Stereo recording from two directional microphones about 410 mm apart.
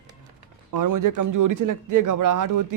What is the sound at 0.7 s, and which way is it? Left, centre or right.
A man's voice, right.